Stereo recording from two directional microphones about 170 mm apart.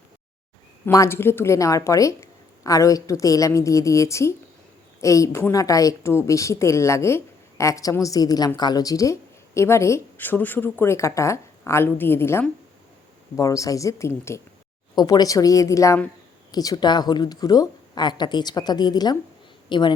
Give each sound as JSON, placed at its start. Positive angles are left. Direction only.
{"t": 0.9, "sound": "a woman's voice", "side_deg": 15}